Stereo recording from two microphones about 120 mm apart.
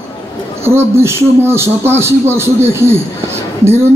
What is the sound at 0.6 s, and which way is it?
A man's voice, 20° right (ahead or behind).